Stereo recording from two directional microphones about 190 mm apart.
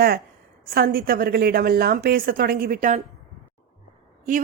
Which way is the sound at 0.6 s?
50° right (ahead or behind).